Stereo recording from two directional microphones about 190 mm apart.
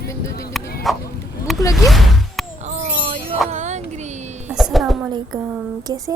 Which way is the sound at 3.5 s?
35° right (ahead or behind).